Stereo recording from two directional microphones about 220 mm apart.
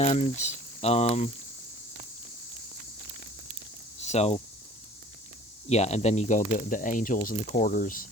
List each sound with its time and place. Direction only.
0.0 s speech: 30° left (ahead or behind)
4.0 s speech: 30° left (ahead or behind)
5.6 s speech: 30° left (ahead or behind)